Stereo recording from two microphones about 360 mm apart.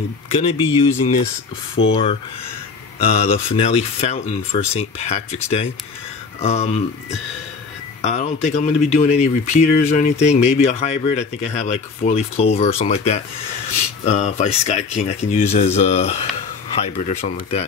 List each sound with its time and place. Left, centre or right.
0.3 s speech: centre
1.8 s speech: left
3.1 s speech: centre
8.0 s speech: centre